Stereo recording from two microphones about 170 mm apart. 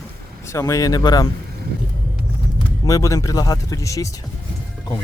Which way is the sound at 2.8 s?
20° left (ahead or behind).